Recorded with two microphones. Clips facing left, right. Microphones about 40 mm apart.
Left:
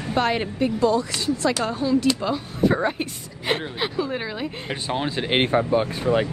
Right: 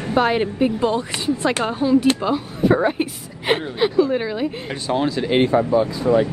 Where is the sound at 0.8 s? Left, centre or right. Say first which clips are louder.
Even; right.